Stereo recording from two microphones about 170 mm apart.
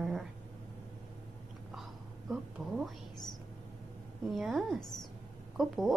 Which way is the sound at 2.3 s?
Centre (ahead or behind).